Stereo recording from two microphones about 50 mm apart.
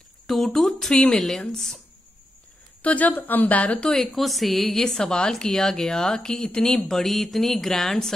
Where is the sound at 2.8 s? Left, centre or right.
Left.